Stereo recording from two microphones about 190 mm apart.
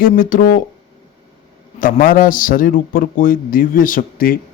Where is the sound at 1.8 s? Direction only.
45° left (ahead or behind).